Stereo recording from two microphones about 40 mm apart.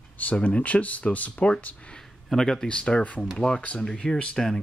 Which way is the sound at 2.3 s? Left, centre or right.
Centre.